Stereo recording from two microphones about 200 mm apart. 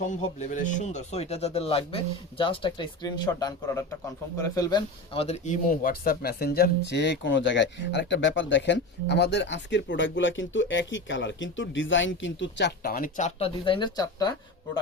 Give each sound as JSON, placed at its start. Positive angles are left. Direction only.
{"t": 0.0, "sound": "speech", "side_deg": 35}